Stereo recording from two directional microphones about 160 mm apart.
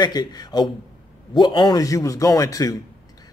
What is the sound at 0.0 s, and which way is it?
A man's voice, 25° left (ahead or behind).